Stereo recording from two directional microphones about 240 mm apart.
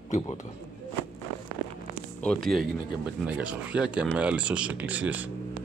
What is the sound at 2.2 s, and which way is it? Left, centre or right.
Speech, centre.